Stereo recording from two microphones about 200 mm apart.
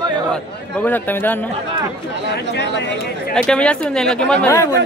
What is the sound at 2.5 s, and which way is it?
Speech, 60° left (ahead or behind).